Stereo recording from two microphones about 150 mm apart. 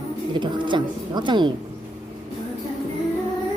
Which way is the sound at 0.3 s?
30° right (ahead or behind).